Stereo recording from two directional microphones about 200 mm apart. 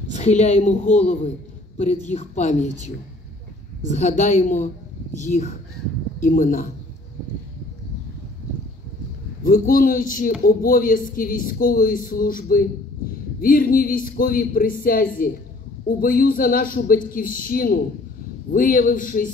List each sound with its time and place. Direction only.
0.1 s a woman's voice: 35° left (ahead or behind)
4.2 s a woman's voice: 35° left (ahead or behind)
9.4 s speech: 45° left (ahead or behind)